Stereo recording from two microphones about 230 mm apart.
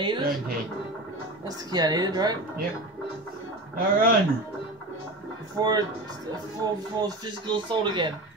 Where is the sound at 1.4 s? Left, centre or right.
Centre.